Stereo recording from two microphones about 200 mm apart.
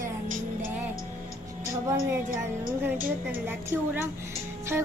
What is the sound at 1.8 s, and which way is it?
A woman's voice, 15° right (ahead or behind).